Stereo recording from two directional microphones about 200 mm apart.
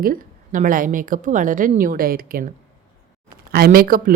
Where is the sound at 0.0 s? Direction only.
45° right (ahead or behind).